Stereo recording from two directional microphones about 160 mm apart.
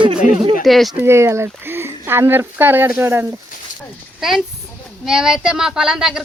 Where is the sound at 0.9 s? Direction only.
15° right (ahead or behind).